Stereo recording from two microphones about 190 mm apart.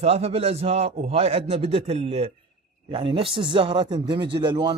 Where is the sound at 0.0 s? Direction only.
30° right (ahead or behind).